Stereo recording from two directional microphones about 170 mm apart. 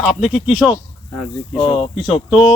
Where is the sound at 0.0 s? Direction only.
5° right (ahead or behind).